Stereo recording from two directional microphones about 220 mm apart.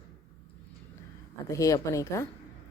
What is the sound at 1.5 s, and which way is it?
Speech, 15° left (ahead or behind).